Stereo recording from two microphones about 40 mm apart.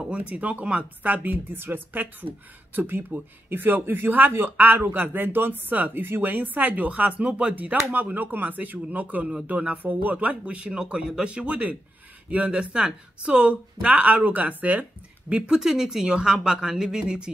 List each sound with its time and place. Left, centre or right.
0.1 s speech: right
1.5 s speech: right
12.4 s speech: right
15.2 s speech: right
15.6 s speech: centre